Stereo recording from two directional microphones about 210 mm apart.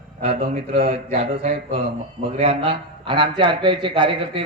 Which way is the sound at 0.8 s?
45° right (ahead or behind).